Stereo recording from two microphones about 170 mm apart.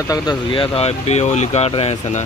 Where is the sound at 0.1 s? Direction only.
25° left (ahead or behind).